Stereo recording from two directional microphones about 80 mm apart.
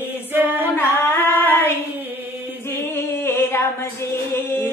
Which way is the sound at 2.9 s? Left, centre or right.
Left.